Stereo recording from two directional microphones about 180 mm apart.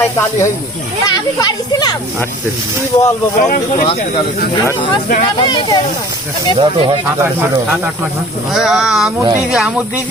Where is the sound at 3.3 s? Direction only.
45° left (ahead or behind).